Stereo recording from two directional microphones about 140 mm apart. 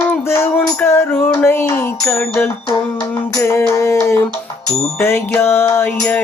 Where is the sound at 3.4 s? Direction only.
20° left (ahead or behind).